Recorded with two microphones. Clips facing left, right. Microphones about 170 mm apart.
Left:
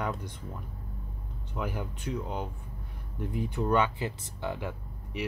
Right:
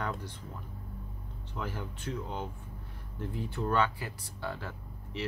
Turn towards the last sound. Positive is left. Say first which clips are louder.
# left 2 dB
turn(degrees=15)  # may be behind; listen again after turning